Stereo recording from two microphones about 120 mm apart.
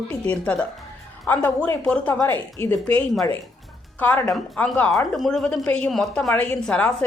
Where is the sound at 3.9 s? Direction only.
10° left (ahead or behind).